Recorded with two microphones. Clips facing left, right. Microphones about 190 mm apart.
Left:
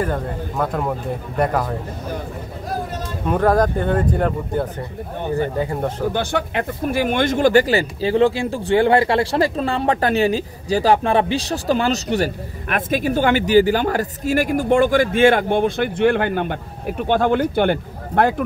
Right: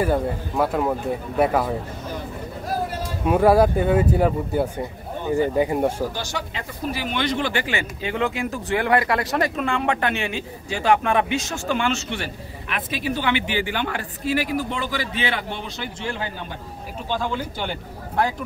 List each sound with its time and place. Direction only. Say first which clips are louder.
0.0 s speech: right 1 dB; 5° right (ahead or behind)
3.3 s speech: right 1 dB; 10° right (ahead or behind)
6.1 s speech: left 9 dB; 60° left (ahead or behind)